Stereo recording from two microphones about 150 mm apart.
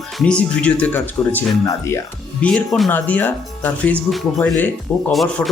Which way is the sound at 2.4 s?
5° left (ahead or behind).